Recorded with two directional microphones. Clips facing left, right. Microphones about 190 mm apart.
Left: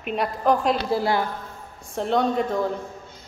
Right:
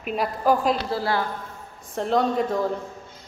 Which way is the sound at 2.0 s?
Centre (ahead or behind).